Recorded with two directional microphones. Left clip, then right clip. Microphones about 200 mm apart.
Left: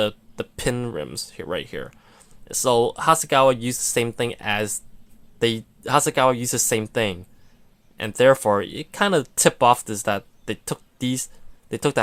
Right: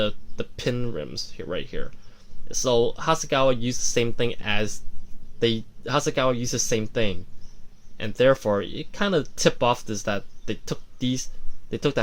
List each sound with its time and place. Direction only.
0.0 s speech: 30° left (ahead or behind)